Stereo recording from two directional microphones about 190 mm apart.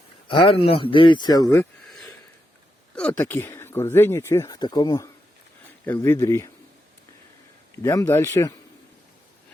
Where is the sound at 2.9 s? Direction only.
5° left (ahead or behind).